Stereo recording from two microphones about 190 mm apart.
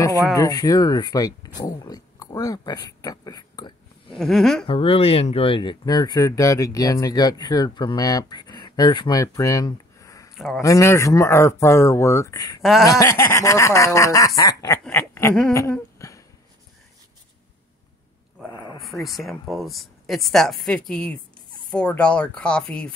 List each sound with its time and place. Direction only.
0.3 s speech: 20° left (ahead or behind)
4.1 s speech: centre (ahead or behind)
4.6 s speech: 30° left (ahead or behind)
10.3 s speech: centre (ahead or behind)
10.6 s snicker: 15° left (ahead or behind)
16.0 s a sound: 15° left (ahead or behind)
18.5 s a sound: 20° left (ahead or behind)
18.8 s speech: centre (ahead or behind)